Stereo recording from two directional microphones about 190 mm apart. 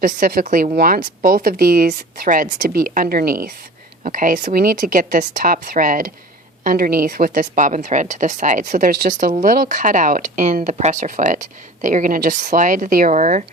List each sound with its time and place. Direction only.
0.0 s speech: 45° right (ahead or behind)